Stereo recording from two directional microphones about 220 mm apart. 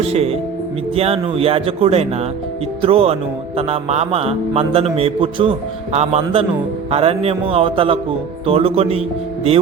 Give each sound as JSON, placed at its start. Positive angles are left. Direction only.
{"t": 0.0, "sound": "mantra", "side_deg": -25}